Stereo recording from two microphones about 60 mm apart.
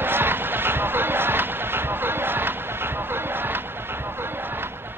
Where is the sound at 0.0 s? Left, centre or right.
Right.